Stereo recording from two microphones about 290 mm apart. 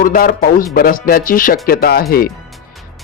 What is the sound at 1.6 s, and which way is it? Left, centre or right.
Music, left.